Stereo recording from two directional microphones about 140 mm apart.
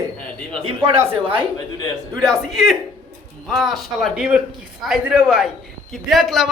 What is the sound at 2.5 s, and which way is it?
Speech, centre (ahead or behind).